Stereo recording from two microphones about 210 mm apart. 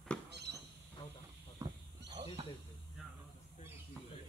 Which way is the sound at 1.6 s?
15° right (ahead or behind).